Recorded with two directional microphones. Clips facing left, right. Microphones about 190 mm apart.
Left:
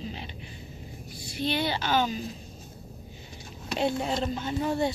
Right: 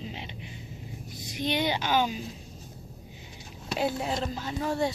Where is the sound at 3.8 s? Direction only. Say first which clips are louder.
Left 2 dB; 5° right (ahead or behind).